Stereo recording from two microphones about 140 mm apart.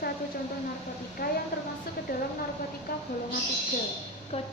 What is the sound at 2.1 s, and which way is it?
Speech, 90° left.